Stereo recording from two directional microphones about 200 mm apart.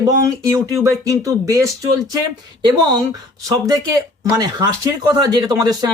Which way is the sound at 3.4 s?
20° right (ahead or behind).